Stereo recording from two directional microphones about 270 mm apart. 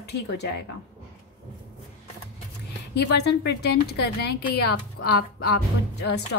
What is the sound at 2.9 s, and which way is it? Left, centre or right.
A woman's voice, left.